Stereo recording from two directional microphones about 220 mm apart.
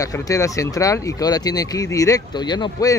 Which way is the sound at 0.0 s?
15° left (ahead or behind).